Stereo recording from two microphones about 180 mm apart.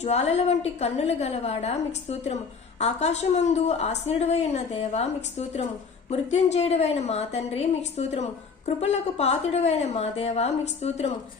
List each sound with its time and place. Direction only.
0.0 s a woman's voice: 35° left (ahead or behind)